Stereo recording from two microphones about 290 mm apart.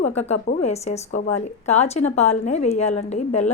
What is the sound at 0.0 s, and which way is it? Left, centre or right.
A woman's voice, left.